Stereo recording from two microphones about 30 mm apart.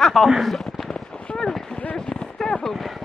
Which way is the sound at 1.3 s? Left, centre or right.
Left.